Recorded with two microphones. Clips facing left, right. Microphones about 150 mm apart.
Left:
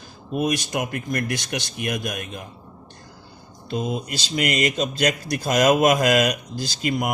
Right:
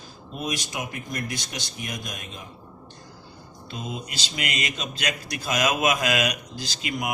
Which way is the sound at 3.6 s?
45° left (ahead or behind).